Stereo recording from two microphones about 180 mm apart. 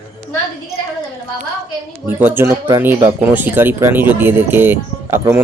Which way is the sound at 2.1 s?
10° right (ahead or behind).